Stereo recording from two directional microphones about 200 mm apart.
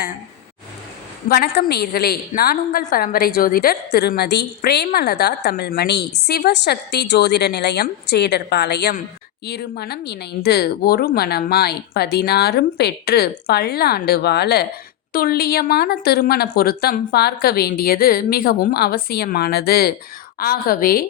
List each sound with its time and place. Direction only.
1.3 s a woman's voice: 50° left (ahead or behind)